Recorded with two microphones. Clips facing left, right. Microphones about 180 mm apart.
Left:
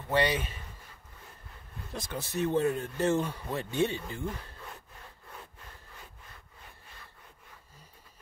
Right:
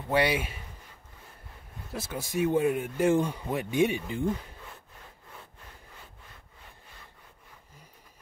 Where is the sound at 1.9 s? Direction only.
5° right (ahead or behind).